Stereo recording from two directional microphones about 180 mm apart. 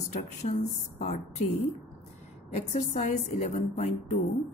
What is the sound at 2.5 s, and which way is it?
A woman's voice, 40° left (ahead or behind).